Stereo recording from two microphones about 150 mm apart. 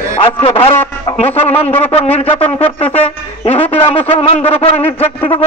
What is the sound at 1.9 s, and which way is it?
A man's voice, 40° left (ahead or behind).